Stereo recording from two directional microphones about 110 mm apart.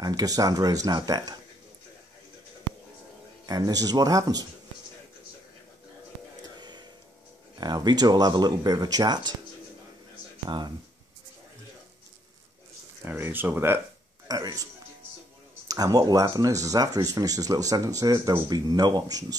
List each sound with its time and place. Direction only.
0.0 s speech: 35° right (ahead or behind)
3.4 s speech: 35° right (ahead or behind)
6.4 s music: 40° right (ahead or behind)
7.5 s speech: 40° right (ahead or behind)
13.0 s speech: 20° right (ahead or behind)
14.2 s a man's voice: 35° right (ahead or behind)
15.7 s speech: 35° right (ahead or behind)